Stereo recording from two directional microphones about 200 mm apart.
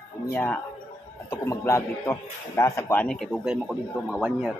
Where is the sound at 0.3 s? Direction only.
10° left (ahead or behind).